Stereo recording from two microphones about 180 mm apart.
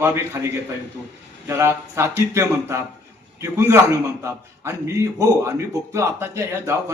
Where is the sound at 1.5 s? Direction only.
15° right (ahead or behind).